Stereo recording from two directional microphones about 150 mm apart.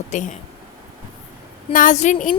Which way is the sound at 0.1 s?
55° left (ahead or behind).